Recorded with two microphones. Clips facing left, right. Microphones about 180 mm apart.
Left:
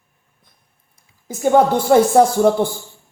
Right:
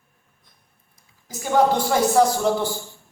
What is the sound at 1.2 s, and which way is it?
Speech, 55° left (ahead or behind).